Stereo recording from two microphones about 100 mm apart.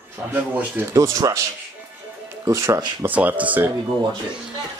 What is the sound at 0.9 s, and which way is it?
Speech, 35° right (ahead or behind).